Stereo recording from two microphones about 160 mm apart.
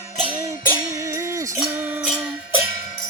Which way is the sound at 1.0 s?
20° right (ahead or behind).